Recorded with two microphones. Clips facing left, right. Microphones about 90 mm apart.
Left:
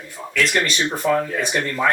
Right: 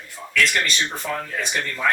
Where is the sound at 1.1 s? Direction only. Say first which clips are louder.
Left 8 dB; 25° left (ahead or behind).